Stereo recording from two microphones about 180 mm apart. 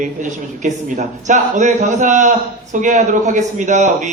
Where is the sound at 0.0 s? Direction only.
45° right (ahead or behind).